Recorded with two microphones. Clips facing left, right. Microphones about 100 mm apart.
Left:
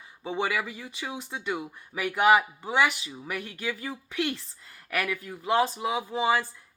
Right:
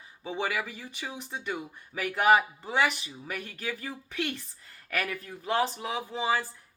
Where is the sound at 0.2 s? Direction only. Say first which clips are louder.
Left 3 dB; 20° left (ahead or behind).